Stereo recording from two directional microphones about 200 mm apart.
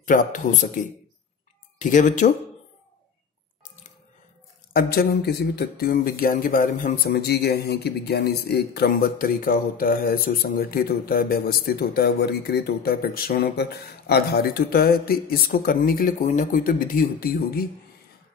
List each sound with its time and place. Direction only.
0.0 s speech: 40° left (ahead or behind)
1.8 s speech: 40° left (ahead or behind)
4.7 s speech: 50° left (ahead or behind)